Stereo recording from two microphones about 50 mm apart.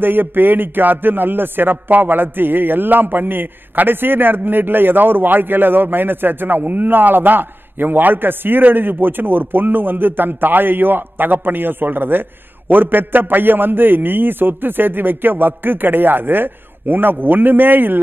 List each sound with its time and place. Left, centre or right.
0.0 s a man's voice: right